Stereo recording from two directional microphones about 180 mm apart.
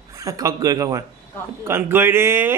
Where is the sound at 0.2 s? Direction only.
20° right (ahead or behind).